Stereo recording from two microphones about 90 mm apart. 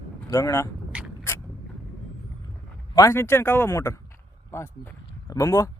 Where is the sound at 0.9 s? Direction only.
15° right (ahead or behind).